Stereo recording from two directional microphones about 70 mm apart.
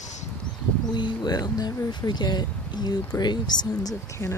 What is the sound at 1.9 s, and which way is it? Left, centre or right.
Speech, left.